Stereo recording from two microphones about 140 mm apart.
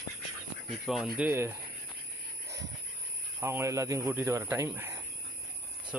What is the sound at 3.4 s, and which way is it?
Speech, 20° right (ahead or behind).